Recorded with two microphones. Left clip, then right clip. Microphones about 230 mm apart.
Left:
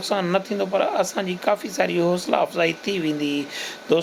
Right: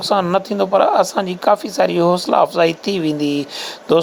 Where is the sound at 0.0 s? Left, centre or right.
Centre.